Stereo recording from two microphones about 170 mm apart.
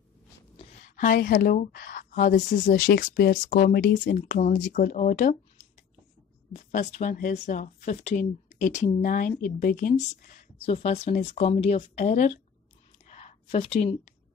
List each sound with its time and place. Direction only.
0.6 s a sound: 45° left (ahead or behind)
1.2 s speech: 55° left (ahead or behind)
2.9 s speech: 70° left (ahead or behind); by 5.4 s 50° left (ahead or behind)
6.5 s speech: 40° left (ahead or behind)
10.6 s speech: 35° left (ahead or behind)
13.0 s a sound: 40° left (ahead or behind)